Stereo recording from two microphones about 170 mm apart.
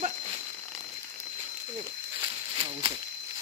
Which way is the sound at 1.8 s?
25° right (ahead or behind).